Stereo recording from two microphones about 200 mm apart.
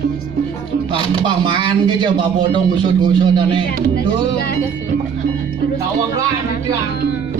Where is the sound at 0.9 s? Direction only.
25° right (ahead or behind).